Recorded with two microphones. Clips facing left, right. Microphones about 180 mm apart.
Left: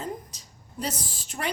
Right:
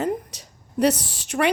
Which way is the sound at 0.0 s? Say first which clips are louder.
Right 10 dB; 70° right (ahead or behind).